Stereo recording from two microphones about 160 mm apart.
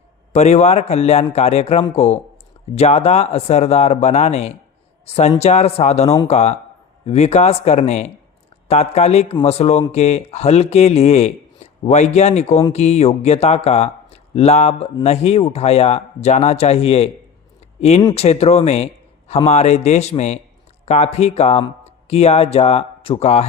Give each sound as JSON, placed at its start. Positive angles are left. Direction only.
{"t": 0.3, "sound": "a man's voice", "side_deg": 45}